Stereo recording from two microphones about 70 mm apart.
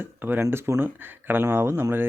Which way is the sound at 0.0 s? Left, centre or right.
Right.